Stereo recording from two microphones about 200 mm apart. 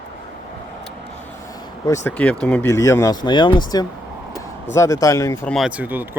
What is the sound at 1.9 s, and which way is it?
Speech, 10° left (ahead or behind).